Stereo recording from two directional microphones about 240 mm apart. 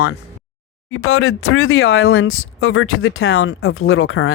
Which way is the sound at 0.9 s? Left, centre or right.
Left.